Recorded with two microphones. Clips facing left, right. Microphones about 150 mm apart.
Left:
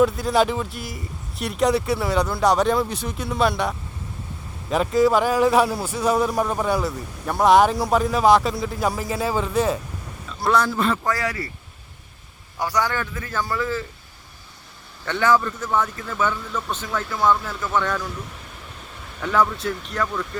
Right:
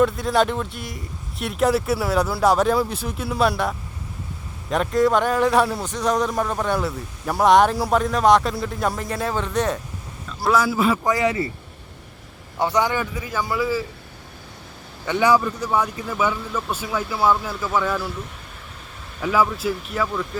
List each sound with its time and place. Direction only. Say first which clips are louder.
0.0 s speech: even; centre (ahead or behind)
11.0 s speech: right 5 dB; 20° right (ahead or behind)
12.5 s speech: right 3 dB; 25° right (ahead or behind)
15.0 s speech: right 1 dB; 10° right (ahead or behind)
19.2 s speech: right 1 dB; 5° right (ahead or behind)